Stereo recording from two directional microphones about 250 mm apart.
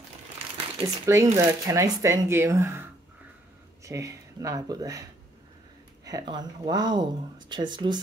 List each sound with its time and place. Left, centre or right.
0.7 s speech: centre
6.0 s speech: centre